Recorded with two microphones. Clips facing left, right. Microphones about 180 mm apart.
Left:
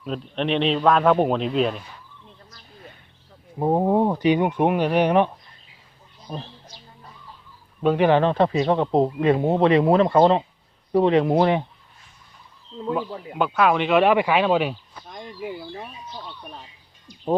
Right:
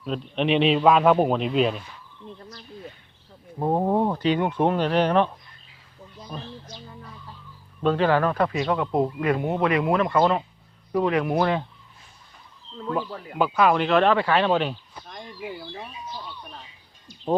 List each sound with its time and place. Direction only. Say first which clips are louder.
0.0 s a man's voice: right 1 dB; centre (ahead or behind)
3.6 s speech: left 3 dB; 10° left (ahead or behind)
7.8 s speech: left 3 dB; 15° left (ahead or behind)
12.9 s speech: left 2 dB; 15° left (ahead or behind)
13.4 s speech: even; centre (ahead or behind)